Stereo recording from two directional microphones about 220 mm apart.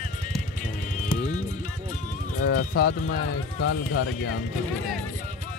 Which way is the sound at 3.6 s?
75° left (ahead or behind).